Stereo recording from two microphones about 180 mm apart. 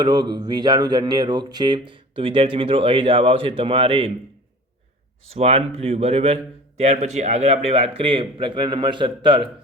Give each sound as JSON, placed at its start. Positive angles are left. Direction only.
{"t": 0.0, "sound": "speech", "side_deg": -25}
{"t": 5.3, "sound": "a man's voice", "side_deg": -35}